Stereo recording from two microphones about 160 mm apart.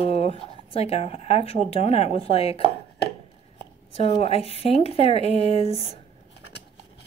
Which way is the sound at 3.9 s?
40° left (ahead or behind).